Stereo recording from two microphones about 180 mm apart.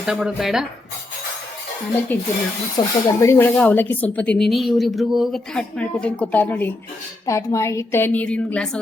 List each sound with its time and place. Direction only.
0.0 s speech: 5° right (ahead or behind)
2.1 s speech: 10° left (ahead or behind)
2.8 s speech: 20° left (ahead or behind); by 8.8 s 5° left (ahead or behind)